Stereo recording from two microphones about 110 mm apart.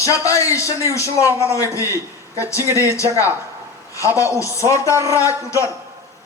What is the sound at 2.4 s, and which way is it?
Speech, 30° left (ahead or behind).